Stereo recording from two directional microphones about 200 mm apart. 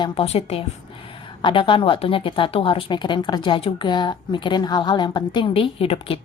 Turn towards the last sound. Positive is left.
turn(degrees=30)  # may be behind; listen again after turning